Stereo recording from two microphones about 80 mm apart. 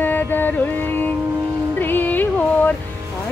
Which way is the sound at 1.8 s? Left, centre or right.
Left.